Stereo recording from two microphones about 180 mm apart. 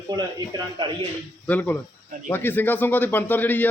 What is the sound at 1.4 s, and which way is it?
A man's voice, 10° left (ahead or behind).